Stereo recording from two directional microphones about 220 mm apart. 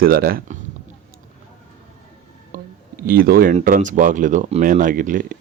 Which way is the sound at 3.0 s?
40° right (ahead or behind).